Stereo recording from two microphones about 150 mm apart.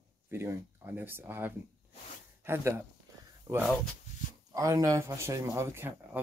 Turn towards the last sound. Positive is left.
turn(degrees=-15)  # may be behind; listen again after turning